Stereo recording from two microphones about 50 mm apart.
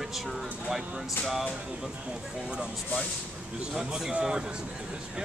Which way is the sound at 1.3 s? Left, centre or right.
Centre.